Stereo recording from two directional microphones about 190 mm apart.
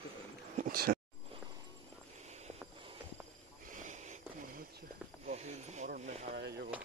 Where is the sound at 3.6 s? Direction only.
40° right (ahead or behind).